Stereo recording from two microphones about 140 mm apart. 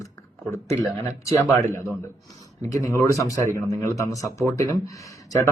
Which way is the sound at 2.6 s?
20° left (ahead or behind).